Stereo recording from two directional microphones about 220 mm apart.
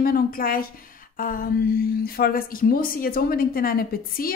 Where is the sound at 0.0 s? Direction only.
40° left (ahead or behind).